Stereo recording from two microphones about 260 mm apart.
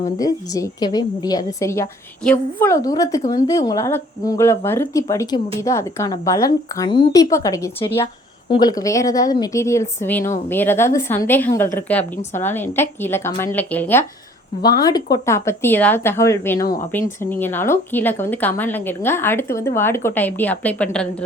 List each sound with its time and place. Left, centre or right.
0.2 s a woman's voice: centre
16.6 s speech: left
17.2 s a woman's voice: centre